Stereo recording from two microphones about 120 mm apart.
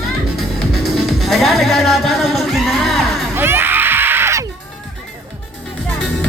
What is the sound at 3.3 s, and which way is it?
Music, 20° right (ahead or behind).